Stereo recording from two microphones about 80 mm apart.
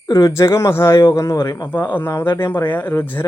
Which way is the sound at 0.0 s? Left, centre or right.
Left.